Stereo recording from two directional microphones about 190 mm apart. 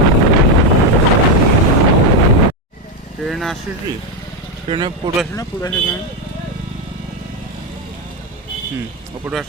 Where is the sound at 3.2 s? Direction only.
Centre (ahead or behind).